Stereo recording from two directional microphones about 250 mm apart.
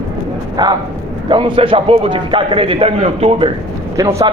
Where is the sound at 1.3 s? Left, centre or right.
Centre.